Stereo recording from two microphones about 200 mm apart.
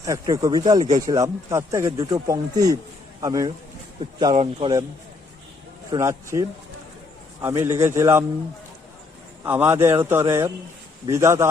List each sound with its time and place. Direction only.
0.0 s speech: 15° right (ahead or behind)
5.9 s speech: 15° right (ahead or behind)
7.4 s speech: 15° right (ahead or behind)
9.4 s speech: 10° right (ahead or behind)